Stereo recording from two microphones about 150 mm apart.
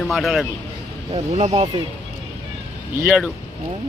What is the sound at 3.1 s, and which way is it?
Speech, 10° right (ahead or behind).